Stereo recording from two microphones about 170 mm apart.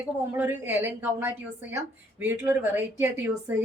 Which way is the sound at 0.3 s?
15° right (ahead or behind).